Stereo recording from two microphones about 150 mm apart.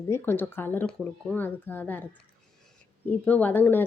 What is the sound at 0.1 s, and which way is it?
A woman's voice, 15° left (ahead or behind).